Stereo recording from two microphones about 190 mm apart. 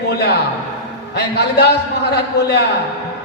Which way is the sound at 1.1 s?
60° left (ahead or behind).